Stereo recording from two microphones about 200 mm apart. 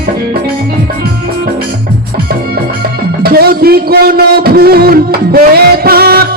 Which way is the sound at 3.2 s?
50° right (ahead or behind).